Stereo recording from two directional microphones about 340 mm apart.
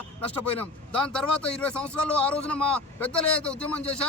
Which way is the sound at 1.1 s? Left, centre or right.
Centre.